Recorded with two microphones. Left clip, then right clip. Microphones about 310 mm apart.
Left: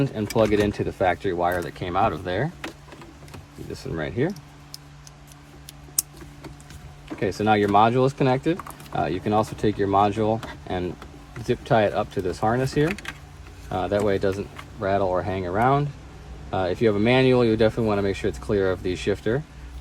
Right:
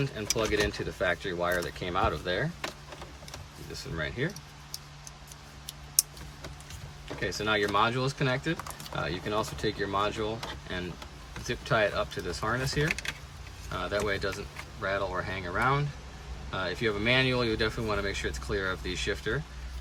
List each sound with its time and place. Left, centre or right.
0.2 s speech: centre
3.9 s speech: centre
7.2 s speech: centre